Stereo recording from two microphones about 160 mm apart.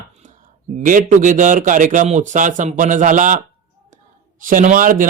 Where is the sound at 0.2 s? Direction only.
50° right (ahead or behind).